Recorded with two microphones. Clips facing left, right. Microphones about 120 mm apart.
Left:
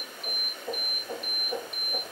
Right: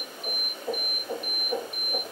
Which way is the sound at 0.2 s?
15° right (ahead or behind).